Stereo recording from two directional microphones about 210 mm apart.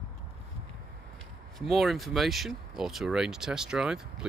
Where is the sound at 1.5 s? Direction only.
Centre (ahead or behind).